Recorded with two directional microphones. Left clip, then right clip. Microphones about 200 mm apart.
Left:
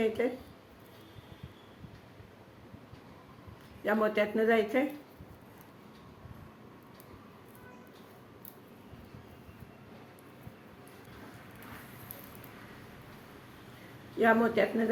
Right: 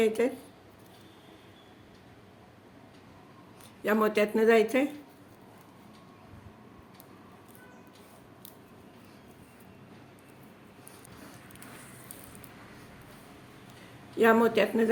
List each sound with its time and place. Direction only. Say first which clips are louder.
0.0 s speech: right 4 dB; 60° right (ahead or behind)
3.8 s speech: right 3 dB; 60° right (ahead or behind)
14.2 s speech: right 3 dB; 60° right (ahead or behind)